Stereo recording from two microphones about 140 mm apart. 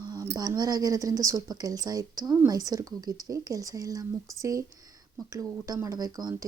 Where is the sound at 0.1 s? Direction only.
25° right (ahead or behind).